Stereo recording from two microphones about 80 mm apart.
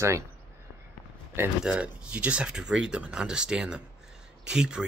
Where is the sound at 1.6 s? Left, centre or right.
Centre.